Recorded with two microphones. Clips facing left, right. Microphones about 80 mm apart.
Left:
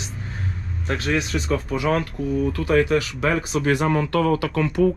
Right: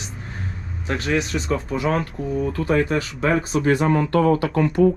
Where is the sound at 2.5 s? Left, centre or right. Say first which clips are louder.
Left 2 dB; right.